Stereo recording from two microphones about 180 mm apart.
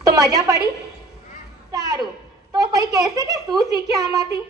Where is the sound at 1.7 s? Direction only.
20° right (ahead or behind).